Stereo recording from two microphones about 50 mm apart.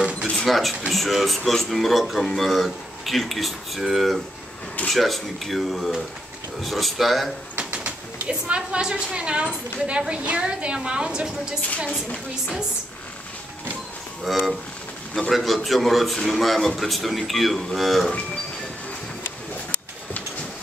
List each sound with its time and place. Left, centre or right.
0.5 s speech: centre
7.5 s a woman's voice: right
14.2 s speech: centre